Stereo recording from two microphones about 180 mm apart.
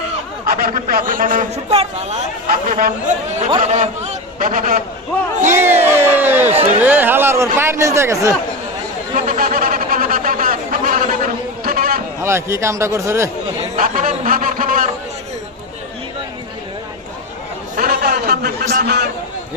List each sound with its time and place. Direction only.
0.4 s a man's voice: 55° right (ahead or behind); by 2.1 s 35° right (ahead or behind)
2.5 s a man's voice: 50° right (ahead or behind)
3.6 s a man's voice: 40° right (ahead or behind)
5.5 s speech: 10° right (ahead or behind)
9.1 s a sound: 50° right (ahead or behind)
12.2 s speech: 15° right (ahead or behind)
13.6 s a sound: 50° right (ahead or behind)
17.7 s a sound: 55° right (ahead or behind)
18.7 s a man's voice: 65° right (ahead or behind)